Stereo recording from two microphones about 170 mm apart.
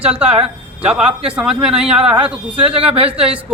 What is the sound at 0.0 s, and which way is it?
A man's voice, 5° right (ahead or behind).